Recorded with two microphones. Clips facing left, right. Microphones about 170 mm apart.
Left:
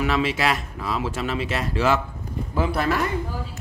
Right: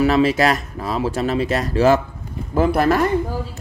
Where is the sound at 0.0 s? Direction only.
40° right (ahead or behind).